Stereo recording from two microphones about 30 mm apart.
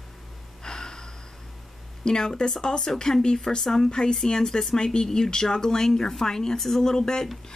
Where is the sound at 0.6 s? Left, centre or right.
Left.